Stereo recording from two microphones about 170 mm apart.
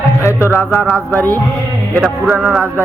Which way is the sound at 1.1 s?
10° left (ahead or behind).